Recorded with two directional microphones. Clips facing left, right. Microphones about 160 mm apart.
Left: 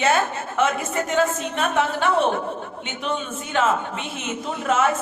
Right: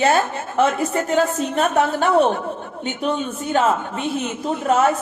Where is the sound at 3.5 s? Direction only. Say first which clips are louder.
Right 3 dB; 40° right (ahead or behind).